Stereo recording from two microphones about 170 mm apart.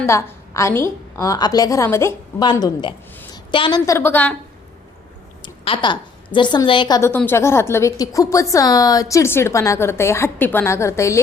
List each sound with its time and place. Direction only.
0.0 s a woman's voice: 15° left (ahead or behind)
5.4 s a woman's voice: 30° left (ahead or behind)
7.1 s a woman's voice: 10° left (ahead or behind)